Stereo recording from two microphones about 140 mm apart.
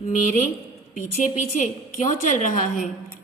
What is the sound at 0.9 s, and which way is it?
A woman's voice, 65° left (ahead or behind).